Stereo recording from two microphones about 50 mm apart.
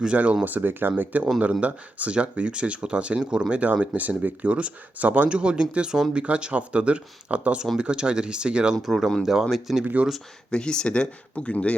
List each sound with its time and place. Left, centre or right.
0.0 s speech: right
0.4 s speech: right
1.6 s speech: right
3.6 s speech: right
5.3 s speech: right
9.2 s speech: centre
9.8 s speech: right
10.5 s speech: centre